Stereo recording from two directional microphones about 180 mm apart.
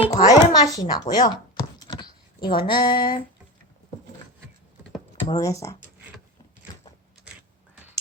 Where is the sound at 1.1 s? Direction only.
50° left (ahead or behind).